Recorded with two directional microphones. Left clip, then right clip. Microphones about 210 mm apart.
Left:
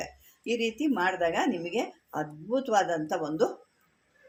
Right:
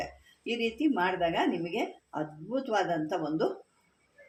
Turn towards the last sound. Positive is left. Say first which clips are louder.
# left 2 dB
turn(degrees=35)  # may be behind; listen again after turning